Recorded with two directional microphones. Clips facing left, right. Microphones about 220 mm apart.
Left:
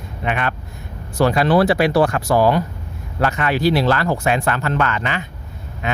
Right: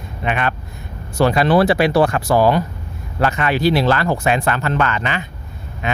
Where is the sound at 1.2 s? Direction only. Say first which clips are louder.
Right 1 dB; 25° right (ahead or behind).